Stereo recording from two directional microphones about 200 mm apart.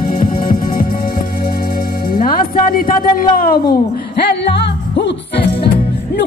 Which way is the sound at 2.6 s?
45° left (ahead or behind).